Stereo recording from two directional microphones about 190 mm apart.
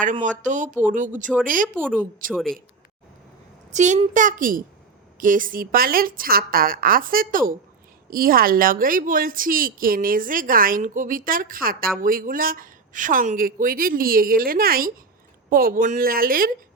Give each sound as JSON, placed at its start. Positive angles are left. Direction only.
{"t": 0.0, "sound": "a woman's voice", "side_deg": -40}
{"t": 1.8, "sound": "speech", "side_deg": -10}
{"t": 3.7, "sound": "a woman's voice", "side_deg": -40}